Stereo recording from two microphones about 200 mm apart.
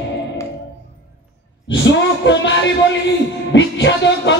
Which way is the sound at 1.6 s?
65° left (ahead or behind).